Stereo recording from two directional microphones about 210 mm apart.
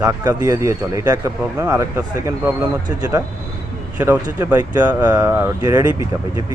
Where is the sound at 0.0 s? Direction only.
15° right (ahead or behind).